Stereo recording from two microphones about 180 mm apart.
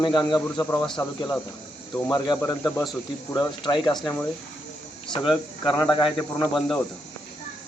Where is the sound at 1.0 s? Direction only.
25° left (ahead or behind).